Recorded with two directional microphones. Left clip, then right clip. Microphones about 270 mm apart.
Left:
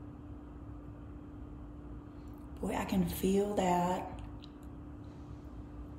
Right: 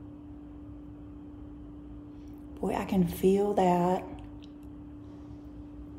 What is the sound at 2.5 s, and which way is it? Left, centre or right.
Speech, right.